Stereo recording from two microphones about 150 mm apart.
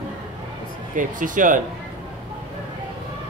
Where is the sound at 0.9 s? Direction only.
60° right (ahead or behind).